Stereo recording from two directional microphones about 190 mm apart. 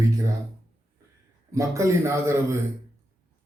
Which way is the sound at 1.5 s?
15° right (ahead or behind).